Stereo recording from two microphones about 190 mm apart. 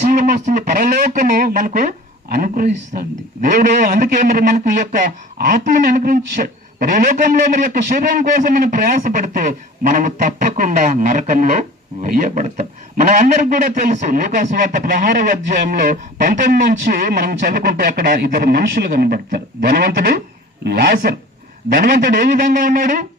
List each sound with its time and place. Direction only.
0.1 s a man's voice: 45° right (ahead or behind)